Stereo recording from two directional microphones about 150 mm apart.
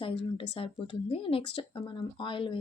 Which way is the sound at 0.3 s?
35° left (ahead or behind).